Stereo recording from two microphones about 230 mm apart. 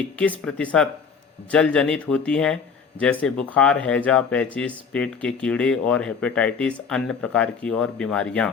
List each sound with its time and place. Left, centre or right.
0.2 s speech: centre